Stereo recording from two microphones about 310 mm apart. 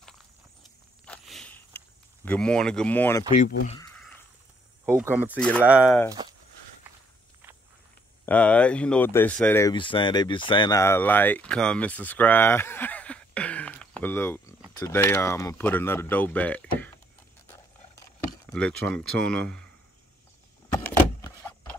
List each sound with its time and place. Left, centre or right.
1.0 s walk: centre
2.2 s speech: centre
3.6 s speech: centre
4.8 s speech: centre
5.3 s speech: centre
8.3 s speech: centre
18.5 s speech: centre
20.7 s vehicle: centre